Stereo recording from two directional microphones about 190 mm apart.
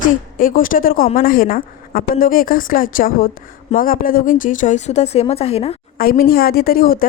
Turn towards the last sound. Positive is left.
turn(degrees=50)  # may be behind; listen again after turning